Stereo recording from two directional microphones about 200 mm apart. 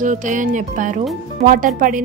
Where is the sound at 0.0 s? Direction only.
40° right (ahead or behind).